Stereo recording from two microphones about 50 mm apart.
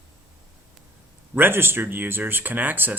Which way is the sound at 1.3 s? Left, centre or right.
Right.